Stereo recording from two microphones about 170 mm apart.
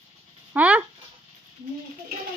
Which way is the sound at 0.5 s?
10° right (ahead or behind).